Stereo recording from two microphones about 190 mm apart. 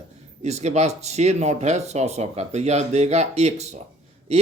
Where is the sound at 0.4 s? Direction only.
35° right (ahead or behind).